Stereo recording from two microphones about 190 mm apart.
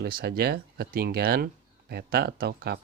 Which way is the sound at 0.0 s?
55° right (ahead or behind).